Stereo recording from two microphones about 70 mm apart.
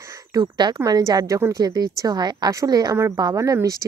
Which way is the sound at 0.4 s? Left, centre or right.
Right.